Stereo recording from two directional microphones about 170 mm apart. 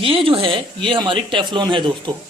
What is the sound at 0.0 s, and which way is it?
Speech, 30° right (ahead or behind).